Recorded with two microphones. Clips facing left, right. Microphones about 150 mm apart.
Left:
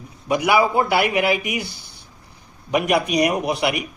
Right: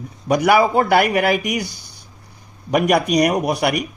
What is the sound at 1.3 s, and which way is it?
Speech, 5° left (ahead or behind).